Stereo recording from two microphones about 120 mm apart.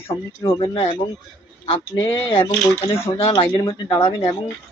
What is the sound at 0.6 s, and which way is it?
Speech, 45° left (ahead or behind).